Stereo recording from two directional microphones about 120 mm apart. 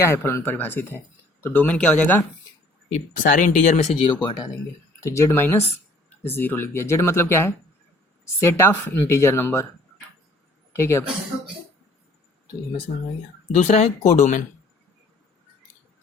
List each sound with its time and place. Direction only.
0.0 s speech: 20° left (ahead or behind)
2.9 s speech: 90° left
4.0 s speech: 40° left (ahead or behind)
4.9 s speech: 25° left (ahead or behind)
10.7 s a woman's voice: 20° left (ahead or behind)
13.6 s speech: 70° left (ahead or behind); by 14.4 s 85° left